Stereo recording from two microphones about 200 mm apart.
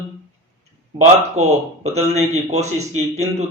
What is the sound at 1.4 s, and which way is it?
Speech, 35° right (ahead or behind).